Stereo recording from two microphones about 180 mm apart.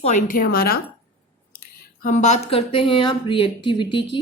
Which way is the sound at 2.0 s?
40° left (ahead or behind).